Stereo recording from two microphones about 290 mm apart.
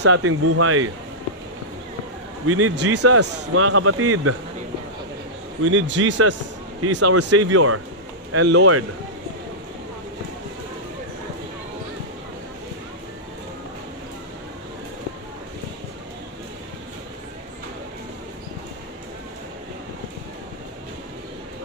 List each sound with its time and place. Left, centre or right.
0.0 s speech: right
2.4 s speech: right
5.6 s speech: right
6.8 s speech: right